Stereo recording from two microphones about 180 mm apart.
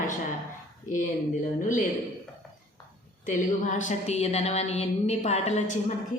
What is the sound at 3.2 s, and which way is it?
A woman's voice, 45° left (ahead or behind).